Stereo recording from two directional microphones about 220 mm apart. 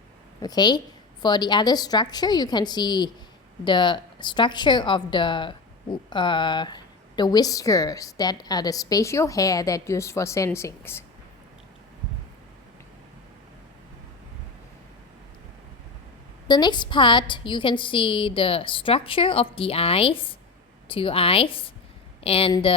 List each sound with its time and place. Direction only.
0.4 s a woman's voice: 20° left (ahead or behind)
16.5 s a woman's voice: 20° left (ahead or behind)